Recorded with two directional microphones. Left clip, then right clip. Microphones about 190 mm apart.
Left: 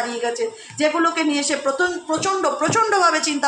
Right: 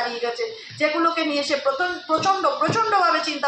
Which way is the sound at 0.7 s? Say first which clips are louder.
Left 2 dB; 45° left (ahead or behind).